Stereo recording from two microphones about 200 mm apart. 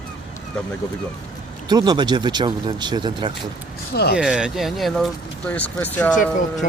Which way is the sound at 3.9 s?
55° left (ahead or behind).